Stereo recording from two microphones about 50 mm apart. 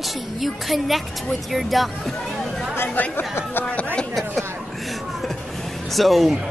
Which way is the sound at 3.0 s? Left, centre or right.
Left.